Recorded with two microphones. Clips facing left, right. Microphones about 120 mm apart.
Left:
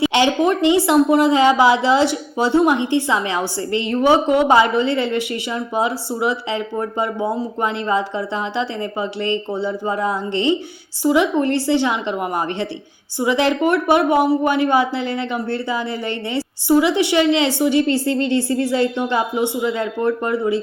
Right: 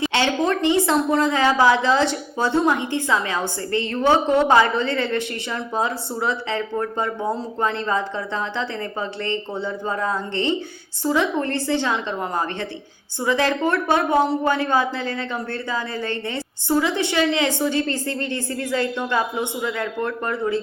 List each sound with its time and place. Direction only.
0.0 s a woman's voice: 15° left (ahead or behind)